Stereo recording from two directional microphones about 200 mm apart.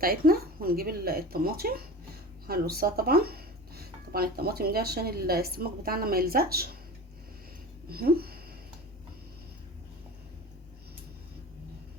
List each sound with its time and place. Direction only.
0.0 s speech: 50° right (ahead or behind)
7.9 s speech: 50° right (ahead or behind)